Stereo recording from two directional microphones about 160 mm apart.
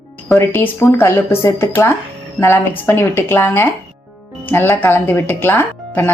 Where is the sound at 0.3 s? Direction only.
15° left (ahead or behind).